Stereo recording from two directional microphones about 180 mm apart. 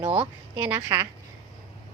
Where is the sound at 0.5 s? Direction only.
10° right (ahead or behind).